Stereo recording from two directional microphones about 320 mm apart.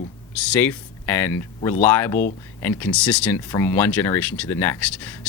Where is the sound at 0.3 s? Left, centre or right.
Centre.